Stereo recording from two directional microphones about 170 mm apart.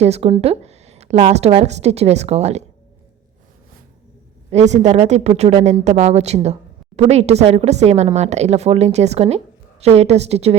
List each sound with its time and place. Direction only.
0.0 s a woman's voice: 35° right (ahead or behind)
4.5 s a woman's voice: 40° right (ahead or behind)